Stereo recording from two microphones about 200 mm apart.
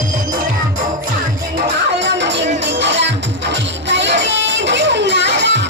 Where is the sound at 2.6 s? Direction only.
65° right (ahead or behind).